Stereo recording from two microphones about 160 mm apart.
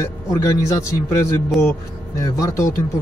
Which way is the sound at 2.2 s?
20° left (ahead or behind).